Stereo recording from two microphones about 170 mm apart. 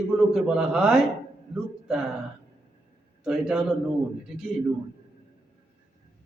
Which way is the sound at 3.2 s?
5° right (ahead or behind).